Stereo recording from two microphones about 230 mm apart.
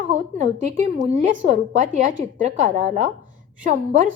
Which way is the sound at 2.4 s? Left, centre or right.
Right.